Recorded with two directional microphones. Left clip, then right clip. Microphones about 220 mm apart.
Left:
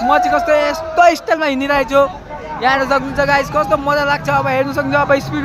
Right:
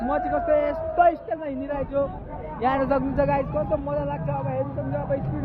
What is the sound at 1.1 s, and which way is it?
Speech, 30° left (ahead or behind).